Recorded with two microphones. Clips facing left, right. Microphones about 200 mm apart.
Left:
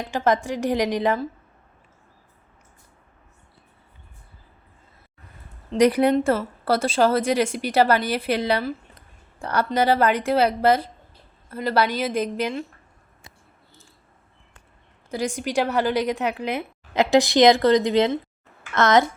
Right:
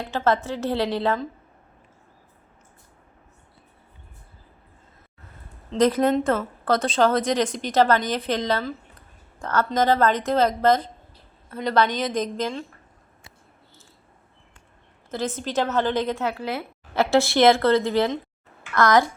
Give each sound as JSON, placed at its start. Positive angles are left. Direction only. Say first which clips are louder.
{"t": 0.0, "sound": "a woman's voice", "louder": "left 1 dB", "side_deg": 15}
{"t": 5.7, "sound": "a woman's voice", "louder": "left 2 dB", "side_deg": 15}
{"t": 15.1, "sound": "a woman's voice", "louder": "left 2 dB", "side_deg": 15}